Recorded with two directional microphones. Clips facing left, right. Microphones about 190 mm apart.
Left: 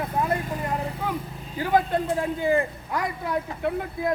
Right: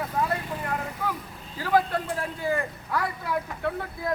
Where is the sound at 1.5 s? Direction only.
20° left (ahead or behind).